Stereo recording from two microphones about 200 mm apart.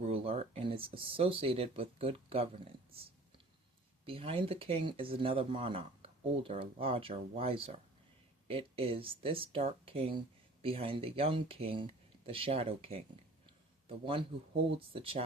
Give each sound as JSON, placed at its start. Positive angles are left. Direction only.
{"t": 0.0, "sound": "a man's voice", "side_deg": -30}